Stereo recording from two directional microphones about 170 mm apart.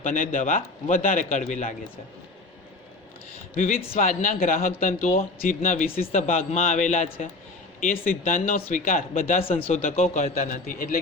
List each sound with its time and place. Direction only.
0.0 s a man's voice: 50° left (ahead or behind)
3.9 s a man's voice: 55° left (ahead or behind)
6.1 s speech: 35° left (ahead or behind)
7.8 s speech: 55° left (ahead or behind)
9.4 s speech: 30° left (ahead or behind)
10.2 s a man's voice: 55° left (ahead or behind)